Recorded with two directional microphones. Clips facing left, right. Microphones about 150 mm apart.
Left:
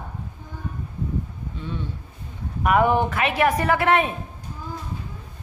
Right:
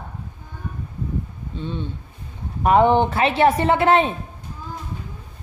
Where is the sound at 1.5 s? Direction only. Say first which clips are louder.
Right 4 dB; 25° right (ahead or behind).